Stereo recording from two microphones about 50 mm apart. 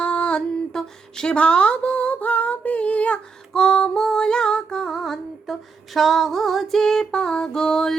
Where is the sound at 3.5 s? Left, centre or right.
Centre.